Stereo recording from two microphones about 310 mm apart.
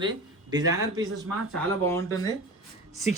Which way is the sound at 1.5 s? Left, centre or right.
Centre.